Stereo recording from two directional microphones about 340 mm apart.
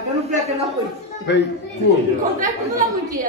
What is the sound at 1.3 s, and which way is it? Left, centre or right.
Speech, left.